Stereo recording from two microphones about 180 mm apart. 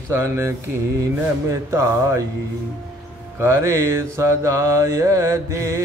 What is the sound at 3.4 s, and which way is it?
Mantra, 15° right (ahead or behind).